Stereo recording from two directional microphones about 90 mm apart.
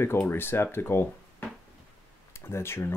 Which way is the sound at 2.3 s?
30° left (ahead or behind).